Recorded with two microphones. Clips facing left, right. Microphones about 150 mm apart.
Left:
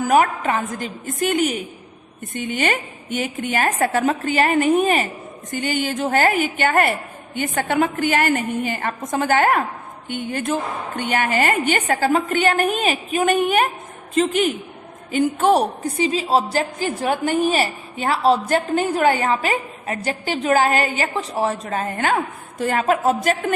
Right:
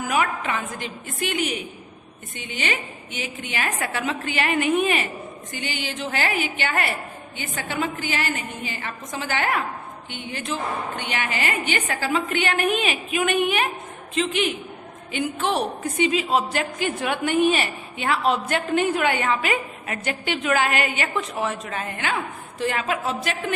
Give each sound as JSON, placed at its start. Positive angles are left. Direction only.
{"t": 0.0, "sound": "a woman's voice", "side_deg": 45}